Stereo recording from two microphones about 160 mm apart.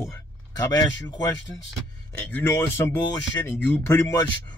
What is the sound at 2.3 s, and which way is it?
Speech, 15° left (ahead or behind).